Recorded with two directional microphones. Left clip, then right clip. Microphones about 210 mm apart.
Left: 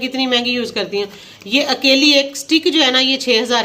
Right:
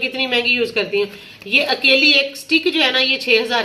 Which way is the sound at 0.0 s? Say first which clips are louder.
Left 1 dB; 55° left (ahead or behind).